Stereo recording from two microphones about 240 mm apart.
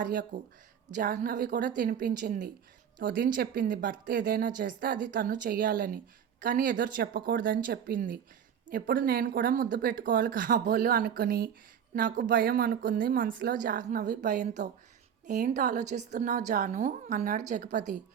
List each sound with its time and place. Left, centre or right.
0.0 s speech: right